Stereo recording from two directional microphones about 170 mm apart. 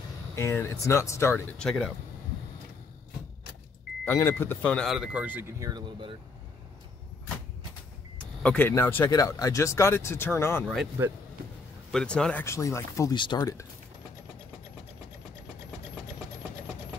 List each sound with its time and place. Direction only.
0.4 s speech: 15° left (ahead or behind)
1.6 s speech: centre (ahead or behind)
4.0 s speech: 15° left (ahead or behind); by 5.7 s 10° right (ahead or behind)
5.7 s speech: 25° right (ahead or behind)
8.2 s speech: 5° left (ahead or behind)
10.6 s speech: 5° left (ahead or behind)
11.9 s speech: 5° left (ahead or behind)
12.4 s speech: 15° left (ahead or behind)